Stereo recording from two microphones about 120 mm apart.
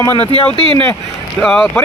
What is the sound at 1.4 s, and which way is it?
Speech, centre (ahead or behind).